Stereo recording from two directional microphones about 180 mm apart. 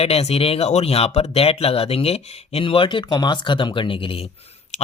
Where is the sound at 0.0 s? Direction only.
35° left (ahead or behind).